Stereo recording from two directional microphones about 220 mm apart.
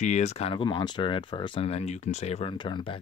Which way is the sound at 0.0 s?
30° left (ahead or behind).